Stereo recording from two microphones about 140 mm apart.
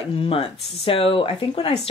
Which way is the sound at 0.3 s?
40° left (ahead or behind).